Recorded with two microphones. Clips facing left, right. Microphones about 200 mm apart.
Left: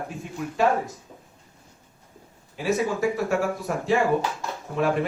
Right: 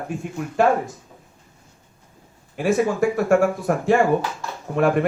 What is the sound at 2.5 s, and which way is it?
A man's voice, 50° right (ahead or behind).